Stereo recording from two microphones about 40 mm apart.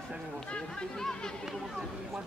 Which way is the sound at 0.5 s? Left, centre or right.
Left.